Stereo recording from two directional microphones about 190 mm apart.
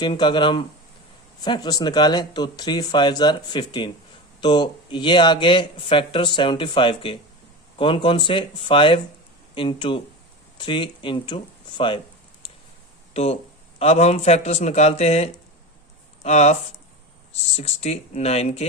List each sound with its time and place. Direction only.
0.0 s speech: 25° left (ahead or behind)
13.7 s a man's voice: 35° left (ahead or behind)